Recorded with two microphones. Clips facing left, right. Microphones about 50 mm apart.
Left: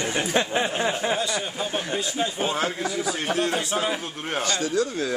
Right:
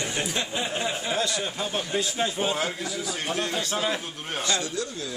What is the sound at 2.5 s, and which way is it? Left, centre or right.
Speech, left.